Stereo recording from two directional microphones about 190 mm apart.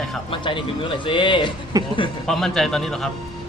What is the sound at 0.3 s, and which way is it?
Speech, 25° left (ahead or behind).